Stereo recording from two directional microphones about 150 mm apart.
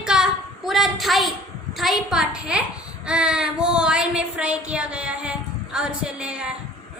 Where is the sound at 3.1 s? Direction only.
5° right (ahead or behind).